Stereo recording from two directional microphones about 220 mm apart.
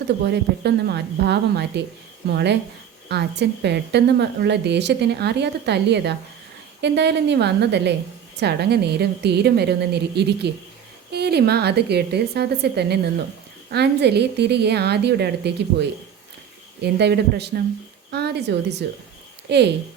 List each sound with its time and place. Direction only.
0.3 s speech: 50° right (ahead or behind)